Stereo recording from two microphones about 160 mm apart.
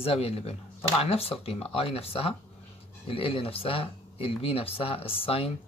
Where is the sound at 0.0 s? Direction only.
40° left (ahead or behind).